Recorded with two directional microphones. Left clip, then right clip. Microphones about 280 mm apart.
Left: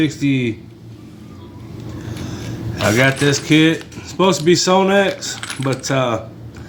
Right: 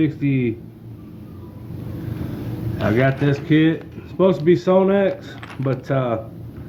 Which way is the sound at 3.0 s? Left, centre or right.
Left.